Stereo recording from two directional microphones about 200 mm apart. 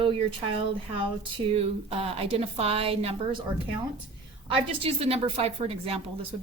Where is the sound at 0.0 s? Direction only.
25° right (ahead or behind).